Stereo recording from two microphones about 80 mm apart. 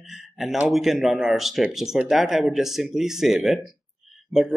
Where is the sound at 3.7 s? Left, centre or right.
Centre.